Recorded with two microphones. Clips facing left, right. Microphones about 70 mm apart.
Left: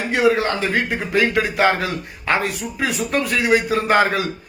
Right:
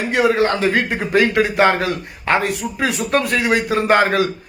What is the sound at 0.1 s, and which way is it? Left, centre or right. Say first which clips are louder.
A man's voice: right 1 dB; right.